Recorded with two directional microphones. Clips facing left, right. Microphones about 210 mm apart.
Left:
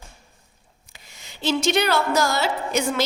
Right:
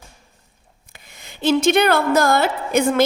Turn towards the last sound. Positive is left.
turn(degrees=-55)  # may be behind; listen again after turning